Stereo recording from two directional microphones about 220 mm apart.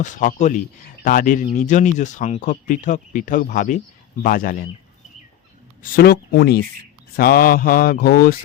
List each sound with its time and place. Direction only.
0.0 s speech: 35° left (ahead or behind)
5.8 s speech: 45° left (ahead or behind)